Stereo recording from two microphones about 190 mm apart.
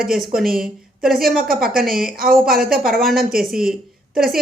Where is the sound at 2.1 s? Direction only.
50° right (ahead or behind).